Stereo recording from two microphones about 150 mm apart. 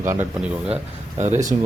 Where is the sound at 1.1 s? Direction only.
50° right (ahead or behind).